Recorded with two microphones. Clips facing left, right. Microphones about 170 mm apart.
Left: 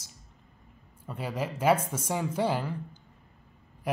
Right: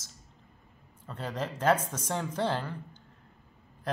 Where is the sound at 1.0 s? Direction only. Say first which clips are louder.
Left 2 dB; 10° left (ahead or behind).